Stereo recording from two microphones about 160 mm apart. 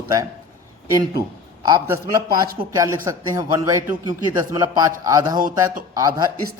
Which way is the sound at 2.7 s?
20° right (ahead or behind).